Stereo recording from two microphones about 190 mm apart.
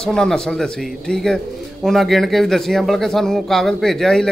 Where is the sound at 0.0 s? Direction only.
5° left (ahead or behind).